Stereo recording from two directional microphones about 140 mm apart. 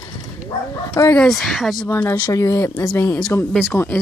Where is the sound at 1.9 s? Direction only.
15° left (ahead or behind).